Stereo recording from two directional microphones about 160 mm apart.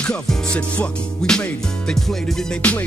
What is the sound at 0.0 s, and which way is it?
Music, 5° left (ahead or behind).